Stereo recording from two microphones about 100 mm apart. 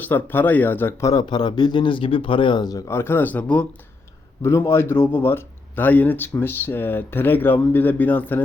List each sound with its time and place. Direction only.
0.0 s speech: 20° left (ahead or behind)
1.2 s speech: 45° left (ahead or behind)
2.9 s speech: 25° left (ahead or behind)
4.4 s speech: 25° left (ahead or behind)